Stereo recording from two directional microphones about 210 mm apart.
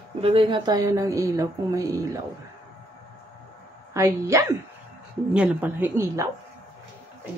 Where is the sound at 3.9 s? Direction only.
15° right (ahead or behind).